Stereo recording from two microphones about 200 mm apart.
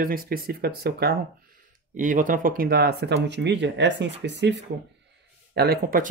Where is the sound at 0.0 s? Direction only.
45° right (ahead or behind).